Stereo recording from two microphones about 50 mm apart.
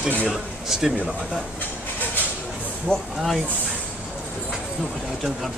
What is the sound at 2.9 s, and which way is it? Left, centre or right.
Speech, centre.